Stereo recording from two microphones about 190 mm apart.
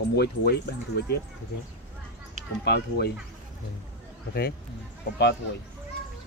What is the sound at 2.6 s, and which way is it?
Speech, 60° left (ahead or behind).